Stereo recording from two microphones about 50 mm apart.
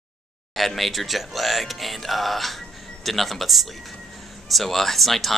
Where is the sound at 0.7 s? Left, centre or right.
Centre.